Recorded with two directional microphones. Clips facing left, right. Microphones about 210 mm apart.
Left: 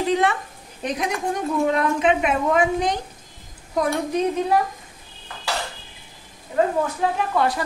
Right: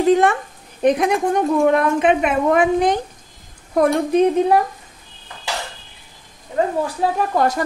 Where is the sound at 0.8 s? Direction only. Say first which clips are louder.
Right 9 dB; 60° right (ahead or behind).